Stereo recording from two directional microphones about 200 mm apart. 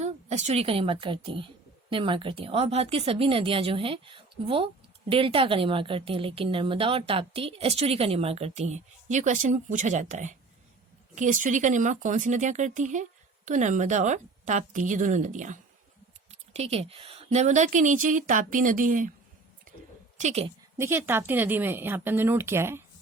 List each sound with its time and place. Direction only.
0.0 s a woman's voice: 35° right (ahead or behind)
20.1 s a woman's voice: 35° right (ahead or behind)
20.7 s speech: 10° right (ahead or behind)